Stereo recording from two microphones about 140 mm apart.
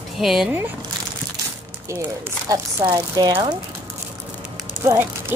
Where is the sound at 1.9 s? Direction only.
20° right (ahead or behind).